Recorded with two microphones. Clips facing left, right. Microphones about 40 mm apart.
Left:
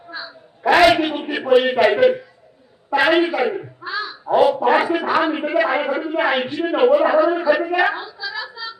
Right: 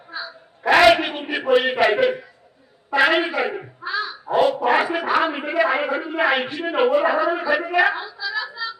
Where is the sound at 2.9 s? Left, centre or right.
Centre.